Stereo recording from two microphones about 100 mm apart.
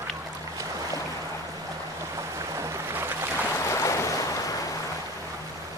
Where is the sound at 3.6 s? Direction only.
30° left (ahead or behind).